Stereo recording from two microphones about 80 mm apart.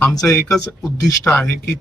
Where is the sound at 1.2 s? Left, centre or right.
Left.